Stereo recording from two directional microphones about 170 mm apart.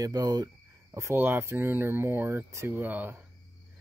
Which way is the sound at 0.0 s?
25° right (ahead or behind).